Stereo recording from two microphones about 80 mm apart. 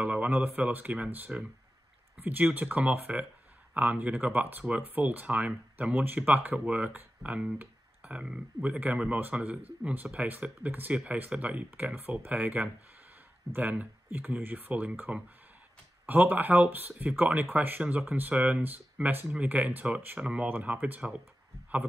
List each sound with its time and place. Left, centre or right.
0.0 s speech: centre
20.4 s speech: right